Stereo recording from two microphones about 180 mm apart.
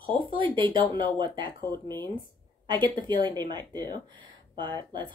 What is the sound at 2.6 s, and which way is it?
A woman's voice, 25° right (ahead or behind).